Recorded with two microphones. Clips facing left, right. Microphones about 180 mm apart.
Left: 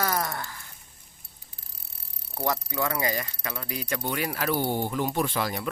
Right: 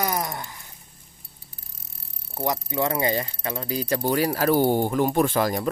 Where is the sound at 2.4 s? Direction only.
25° right (ahead or behind).